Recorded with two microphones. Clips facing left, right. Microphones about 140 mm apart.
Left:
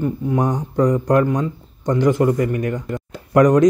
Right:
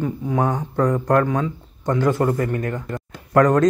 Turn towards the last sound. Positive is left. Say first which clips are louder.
# left 3 dB
turn(degrees=15)  # may be behind; listen again after turning